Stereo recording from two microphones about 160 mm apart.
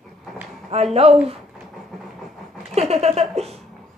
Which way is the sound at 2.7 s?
40° right (ahead or behind).